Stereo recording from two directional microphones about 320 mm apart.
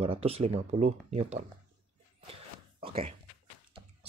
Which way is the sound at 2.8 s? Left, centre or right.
Centre.